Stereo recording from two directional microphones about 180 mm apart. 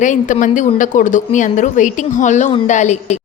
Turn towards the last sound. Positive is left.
turn(degrees=40)  # may be behind; listen again after turning